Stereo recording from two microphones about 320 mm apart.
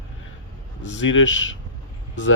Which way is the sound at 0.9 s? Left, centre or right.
Left.